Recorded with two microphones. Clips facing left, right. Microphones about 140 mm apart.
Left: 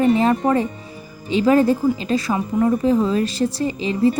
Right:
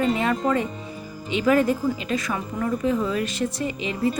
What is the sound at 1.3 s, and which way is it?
A woman's voice, 30° left (ahead or behind).